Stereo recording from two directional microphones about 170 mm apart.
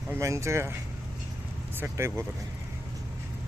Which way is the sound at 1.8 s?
15° right (ahead or behind).